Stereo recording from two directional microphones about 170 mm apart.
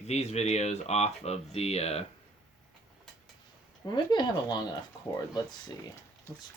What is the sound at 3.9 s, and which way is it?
Speech, 25° left (ahead or behind).